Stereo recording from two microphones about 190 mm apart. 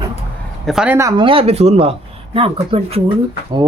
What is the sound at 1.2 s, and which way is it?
Speech, 30° right (ahead or behind).